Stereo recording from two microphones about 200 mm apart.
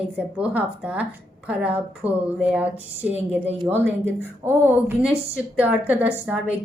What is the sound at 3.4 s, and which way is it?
Speech, 30° right (ahead or behind).